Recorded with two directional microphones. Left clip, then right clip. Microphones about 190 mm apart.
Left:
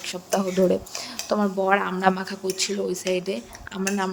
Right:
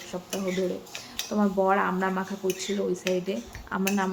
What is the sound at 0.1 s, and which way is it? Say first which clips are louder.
Speech: left 9 dB; 45° left (ahead or behind).